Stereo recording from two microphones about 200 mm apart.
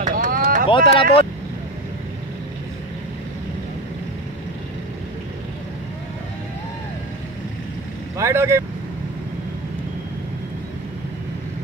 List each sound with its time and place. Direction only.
0.0 s vehicle: 40° right (ahead or behind)
0.7 s speech: 25° left (ahead or behind)
8.2 s speech: 15° right (ahead or behind)